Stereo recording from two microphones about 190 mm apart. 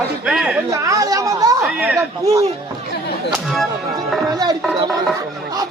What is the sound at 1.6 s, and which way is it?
Chatter, 5° right (ahead or behind).